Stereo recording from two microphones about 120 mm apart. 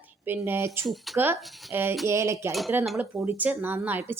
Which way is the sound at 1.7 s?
20° right (ahead or behind).